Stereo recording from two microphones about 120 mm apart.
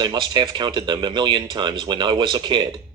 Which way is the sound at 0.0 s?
40° right (ahead or behind).